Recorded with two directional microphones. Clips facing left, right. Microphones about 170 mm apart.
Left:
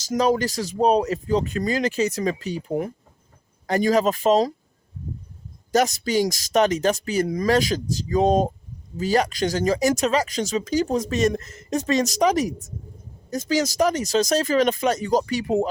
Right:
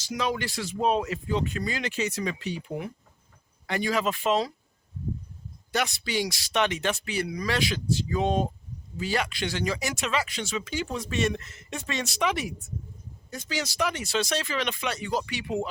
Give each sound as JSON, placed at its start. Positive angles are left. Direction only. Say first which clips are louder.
{"t": 0.0, "sound": "speech", "louder": "left 9 dB", "side_deg": 40}
{"t": 5.7, "sound": "speech", "louder": "left 8 dB", "side_deg": 40}